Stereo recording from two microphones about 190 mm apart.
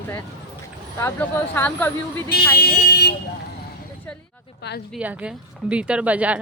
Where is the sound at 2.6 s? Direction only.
55° left (ahead or behind).